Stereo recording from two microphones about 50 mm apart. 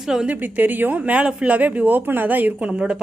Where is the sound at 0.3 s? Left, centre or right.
Right.